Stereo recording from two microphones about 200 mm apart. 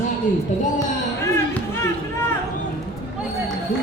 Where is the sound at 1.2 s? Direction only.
10° left (ahead or behind).